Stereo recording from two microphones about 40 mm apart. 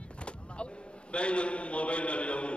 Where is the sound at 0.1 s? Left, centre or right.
Left.